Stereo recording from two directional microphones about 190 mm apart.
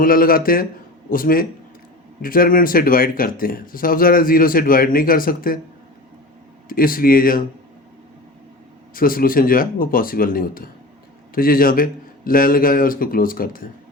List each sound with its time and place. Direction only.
0.0 s speech: 50° left (ahead or behind)
6.7 s speech: 50° left (ahead or behind)
9.0 s speech: 50° left (ahead or behind)